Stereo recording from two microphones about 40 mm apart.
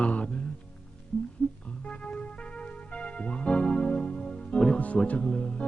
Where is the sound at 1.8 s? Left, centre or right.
Left.